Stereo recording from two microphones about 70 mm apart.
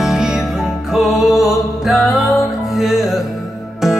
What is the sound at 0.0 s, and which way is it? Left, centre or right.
Music, centre.